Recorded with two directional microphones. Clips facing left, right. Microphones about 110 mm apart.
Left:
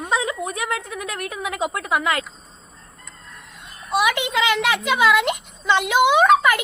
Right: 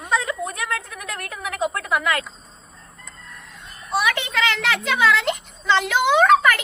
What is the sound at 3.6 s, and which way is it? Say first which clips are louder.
A woman's voice: left 2 dB; 15° left (ahead or behind).